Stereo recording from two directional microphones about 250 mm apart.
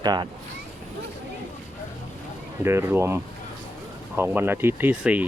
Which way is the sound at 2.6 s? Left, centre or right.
Centre.